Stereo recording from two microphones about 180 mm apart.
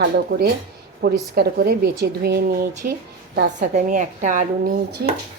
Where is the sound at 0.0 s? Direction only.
65° right (ahead or behind).